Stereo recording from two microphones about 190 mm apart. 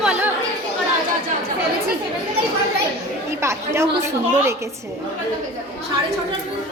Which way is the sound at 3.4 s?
15° right (ahead or behind).